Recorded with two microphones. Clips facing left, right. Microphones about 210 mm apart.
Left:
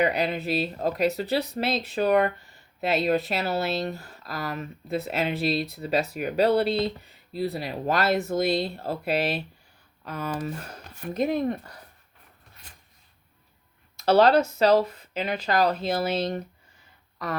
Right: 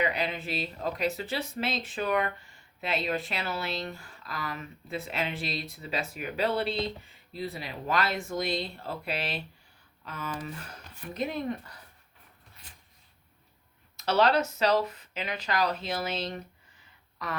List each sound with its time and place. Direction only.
0.0 s speech: 40° left (ahead or behind)
14.0 s speech: 35° left (ahead or behind)
15.4 s speech: 50° left (ahead or behind)